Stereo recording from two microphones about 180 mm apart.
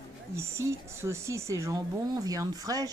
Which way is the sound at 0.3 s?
15° right (ahead or behind).